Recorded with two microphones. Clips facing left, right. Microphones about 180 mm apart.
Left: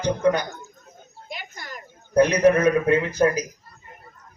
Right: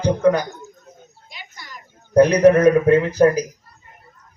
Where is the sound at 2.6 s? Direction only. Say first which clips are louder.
Right 5 dB; 35° right (ahead or behind).